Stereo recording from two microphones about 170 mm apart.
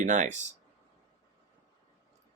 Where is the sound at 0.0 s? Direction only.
45° right (ahead or behind).